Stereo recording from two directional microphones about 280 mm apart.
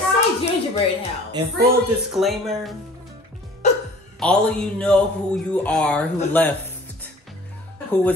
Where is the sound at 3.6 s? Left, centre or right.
Left.